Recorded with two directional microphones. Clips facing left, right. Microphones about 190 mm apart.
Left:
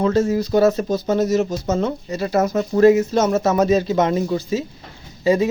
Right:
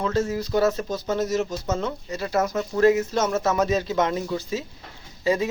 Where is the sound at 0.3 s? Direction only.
35° left (ahead or behind).